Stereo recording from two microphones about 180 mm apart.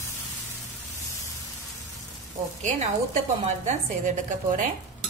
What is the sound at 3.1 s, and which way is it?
A woman's voice, 40° right (ahead or behind).